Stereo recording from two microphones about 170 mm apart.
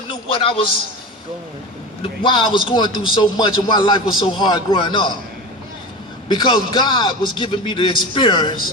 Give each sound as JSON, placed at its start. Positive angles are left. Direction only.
{"t": 0.1, "sound": "a sound", "side_deg": 30}
{"t": 2.0, "sound": "a man's voice", "side_deg": 30}
{"t": 6.2, "sound": "a man's voice", "side_deg": 25}